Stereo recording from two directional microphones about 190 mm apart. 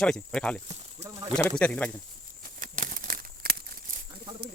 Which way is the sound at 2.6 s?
45° right (ahead or behind).